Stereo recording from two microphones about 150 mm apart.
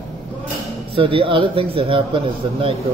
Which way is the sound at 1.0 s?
35° right (ahead or behind).